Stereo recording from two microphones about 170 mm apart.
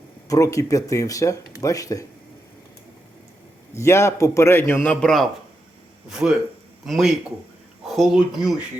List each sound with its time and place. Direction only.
0.3 s speech: 20° left (ahead or behind)
3.8 s a man's voice: 15° left (ahead or behind); by 8.5 s centre (ahead or behind)